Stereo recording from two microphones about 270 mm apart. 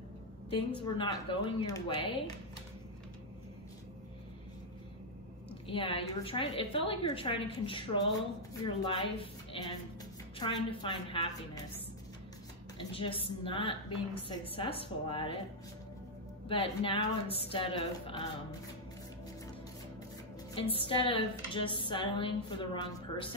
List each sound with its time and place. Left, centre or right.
0.6 s speech: centre
5.7 s a woman's voice: centre
12.7 s a woman's voice: centre
16.4 s a woman's voice: centre
20.7 s a woman's voice: centre